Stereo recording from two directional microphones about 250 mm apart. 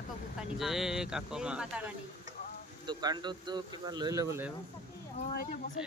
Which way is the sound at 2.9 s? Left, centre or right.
Centre.